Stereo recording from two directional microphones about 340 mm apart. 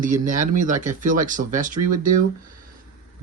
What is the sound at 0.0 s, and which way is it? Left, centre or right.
Speech, right.